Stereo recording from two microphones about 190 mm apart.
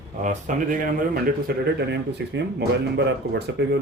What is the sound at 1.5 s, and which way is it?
Speech, 55° right (ahead or behind).